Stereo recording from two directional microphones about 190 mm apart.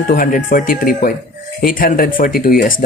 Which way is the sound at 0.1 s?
50° left (ahead or behind).